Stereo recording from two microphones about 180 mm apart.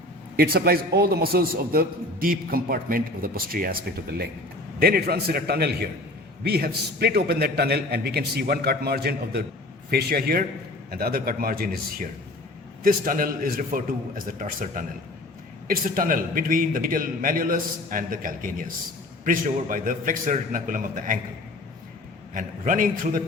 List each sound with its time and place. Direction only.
0.3 s a man's voice: 55° right (ahead or behind)
4.8 s a man's voice: 60° right (ahead or behind)
22.4 s a man's voice: 45° right (ahead or behind)